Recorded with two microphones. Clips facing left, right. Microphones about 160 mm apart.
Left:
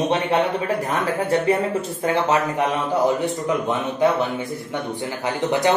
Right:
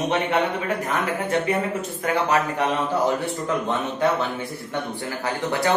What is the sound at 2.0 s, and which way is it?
Speech, 25° left (ahead or behind).